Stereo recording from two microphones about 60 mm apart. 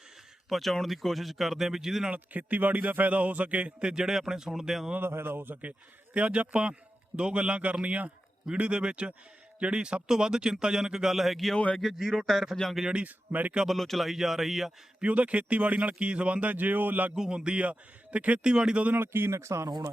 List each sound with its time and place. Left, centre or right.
0.5 s speech: centre
2.0 s a man's voice: right; by 4.9 s centre
4.9 s speech: right
6.1 s a man's voice: right; by 11.5 s centre
11.5 s speech: centre
11.8 s speech: centre
12.7 s a man's voice: centre
13.7 s speech: centre
15.0 s a man's voice: right
17.2 s speech: centre
18.9 s speech: right